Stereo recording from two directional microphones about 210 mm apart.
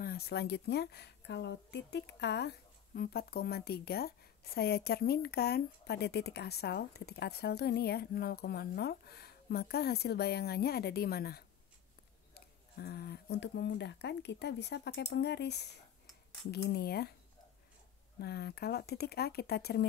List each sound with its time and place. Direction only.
0.0 s a woman's voice: 45° left (ahead or behind)
18.2 s a woman's voice: 50° left (ahead or behind)